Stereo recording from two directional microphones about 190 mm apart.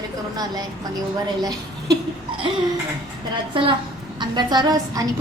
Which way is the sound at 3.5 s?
30° right (ahead or behind).